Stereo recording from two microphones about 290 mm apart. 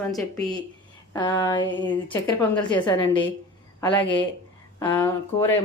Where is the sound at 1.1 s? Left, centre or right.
Centre.